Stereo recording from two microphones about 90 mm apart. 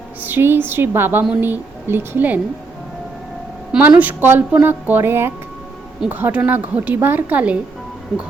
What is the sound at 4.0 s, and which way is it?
Speech, 20° right (ahead or behind).